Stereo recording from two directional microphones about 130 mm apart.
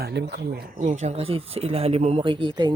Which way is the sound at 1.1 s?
45° right (ahead or behind).